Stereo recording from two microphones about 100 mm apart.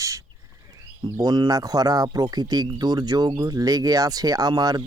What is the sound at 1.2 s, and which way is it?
Speech, 40° right (ahead or behind).